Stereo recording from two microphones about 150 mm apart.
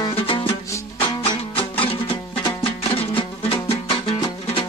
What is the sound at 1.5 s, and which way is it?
Music, 35° left (ahead or behind).